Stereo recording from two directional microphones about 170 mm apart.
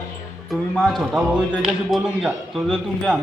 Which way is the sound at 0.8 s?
Centre (ahead or behind).